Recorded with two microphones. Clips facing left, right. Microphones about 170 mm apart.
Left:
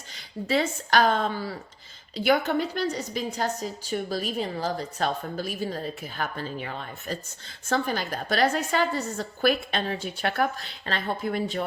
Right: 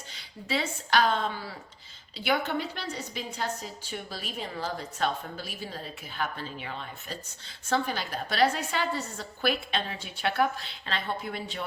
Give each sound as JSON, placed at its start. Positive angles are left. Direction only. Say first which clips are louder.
{"t": 0.1, "sound": "a woman's voice", "louder": "left 6 dB", "side_deg": 45}